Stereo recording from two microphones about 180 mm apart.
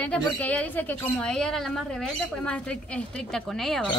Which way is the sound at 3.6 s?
Centre (ahead or behind).